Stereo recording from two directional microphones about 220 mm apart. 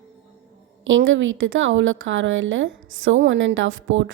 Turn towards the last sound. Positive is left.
turn(degrees=-60)  # may be behind; listen again after turning